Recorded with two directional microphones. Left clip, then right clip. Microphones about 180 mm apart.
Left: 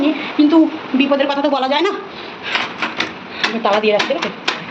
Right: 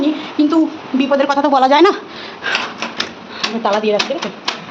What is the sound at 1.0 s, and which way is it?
Speech, 25° right (ahead or behind).